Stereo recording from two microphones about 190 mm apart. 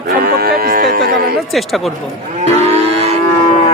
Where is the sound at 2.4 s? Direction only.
35° right (ahead or behind).